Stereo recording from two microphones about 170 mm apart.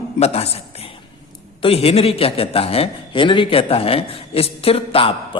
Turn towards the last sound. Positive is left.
turn(degrees=35)  # may be behind; listen again after turning